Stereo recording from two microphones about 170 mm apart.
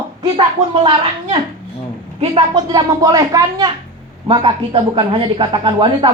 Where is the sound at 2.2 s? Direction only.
30° right (ahead or behind).